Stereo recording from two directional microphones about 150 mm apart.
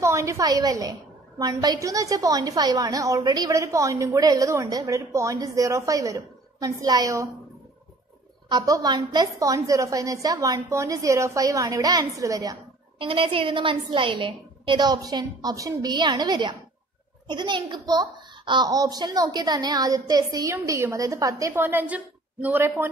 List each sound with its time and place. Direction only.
0.0 s a woman's voice: 20° right (ahead or behind)
8.5 s a woman's voice: 25° right (ahead or behind)
13.0 s a woman's voice: 35° right (ahead or behind); by 22.8 s 15° right (ahead or behind)